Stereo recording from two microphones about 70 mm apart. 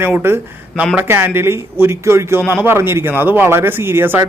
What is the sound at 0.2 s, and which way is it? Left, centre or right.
Speech, right.